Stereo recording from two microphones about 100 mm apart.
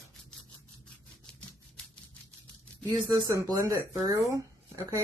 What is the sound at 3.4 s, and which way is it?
Speech, 35° right (ahead or behind).